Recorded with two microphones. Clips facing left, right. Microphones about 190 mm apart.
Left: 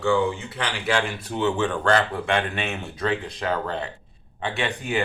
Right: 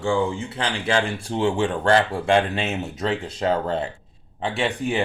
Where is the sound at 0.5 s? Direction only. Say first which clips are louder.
Right 3 dB; 30° right (ahead or behind).